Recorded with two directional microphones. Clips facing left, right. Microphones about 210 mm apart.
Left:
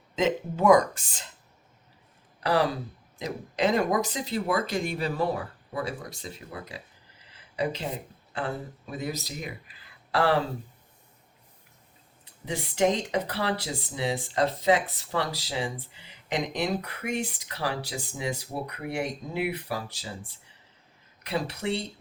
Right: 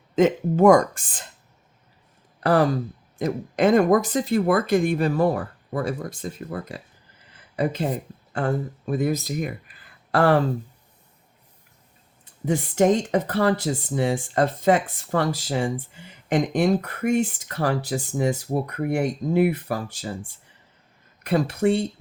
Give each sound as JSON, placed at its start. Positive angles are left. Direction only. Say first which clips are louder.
{"t": 0.2, "sound": "speech", "louder": "right 7 dB", "side_deg": -50}
{"t": 2.4, "sound": "speech", "louder": "right 6 dB", "side_deg": -50}
{"t": 7.3, "sound": "a sound", "louder": "right 5 dB", "side_deg": -50}
{"t": 8.3, "sound": "speech", "louder": "right 7 dB", "side_deg": -45}
{"t": 12.2, "sound": "speech", "louder": "right 9 dB", "side_deg": -50}